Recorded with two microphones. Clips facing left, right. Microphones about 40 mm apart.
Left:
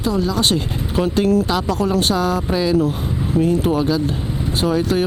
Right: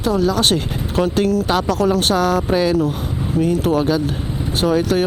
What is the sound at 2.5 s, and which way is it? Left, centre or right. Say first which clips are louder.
Speech: left 1 dB; centre.